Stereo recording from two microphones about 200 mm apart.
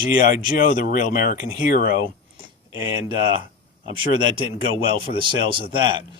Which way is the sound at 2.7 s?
20° right (ahead or behind).